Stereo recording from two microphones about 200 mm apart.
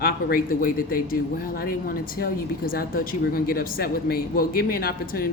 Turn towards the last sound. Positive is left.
turn(degrees=50)  # may be behind; listen again after turning